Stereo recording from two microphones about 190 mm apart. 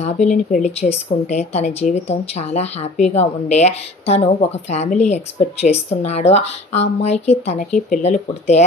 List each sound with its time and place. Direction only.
0.0 s speech: 40° left (ahead or behind)